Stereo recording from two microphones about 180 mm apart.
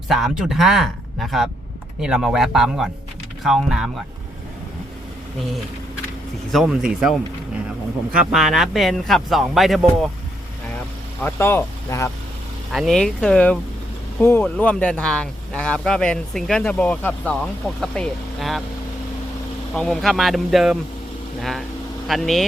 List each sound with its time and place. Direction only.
0.1 s speech: centre (ahead or behind)
6.5 s speech: centre (ahead or behind)
8.3 s speech: centre (ahead or behind)
11.2 s speech: 15° left (ahead or behind)
12.7 s speech: centre (ahead or behind)
19.7 s speech: centre (ahead or behind)
22.0 s speech: centre (ahead or behind)